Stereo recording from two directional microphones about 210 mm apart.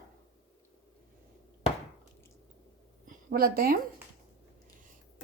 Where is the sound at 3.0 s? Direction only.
40° right (ahead or behind).